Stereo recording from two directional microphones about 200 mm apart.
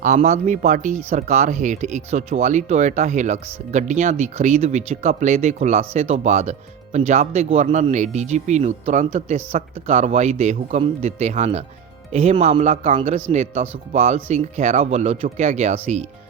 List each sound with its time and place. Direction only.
0.0 s speech: 35° right (ahead or behind)